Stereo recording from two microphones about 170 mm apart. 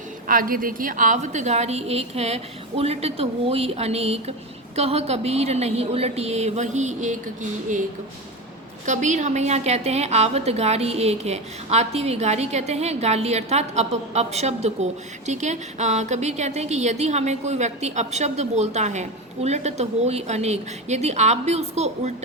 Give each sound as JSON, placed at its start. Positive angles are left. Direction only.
{"t": 0.3, "sound": "a woman's voice", "side_deg": -55}
{"t": 8.9, "sound": "a woman's voice", "side_deg": -45}